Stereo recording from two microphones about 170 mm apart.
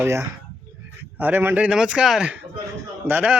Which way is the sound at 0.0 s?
15° right (ahead or behind).